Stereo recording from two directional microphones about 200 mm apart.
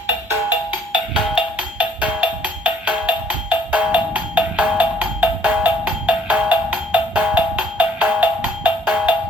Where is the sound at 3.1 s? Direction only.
5° right (ahead or behind).